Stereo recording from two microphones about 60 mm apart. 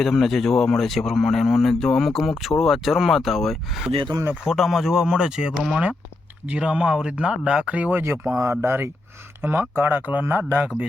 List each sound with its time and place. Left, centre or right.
0.0 s a man's voice: centre; by 8.0 s right
8.0 s speech: right